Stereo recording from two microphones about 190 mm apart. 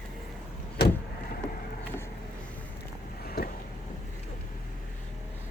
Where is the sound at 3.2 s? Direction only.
55° left (ahead or behind).